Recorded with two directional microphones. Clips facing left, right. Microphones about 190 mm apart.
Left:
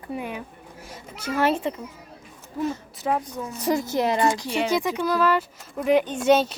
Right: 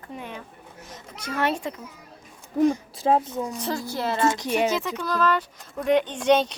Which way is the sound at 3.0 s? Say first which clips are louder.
Right 3 dB; 25° right (ahead or behind).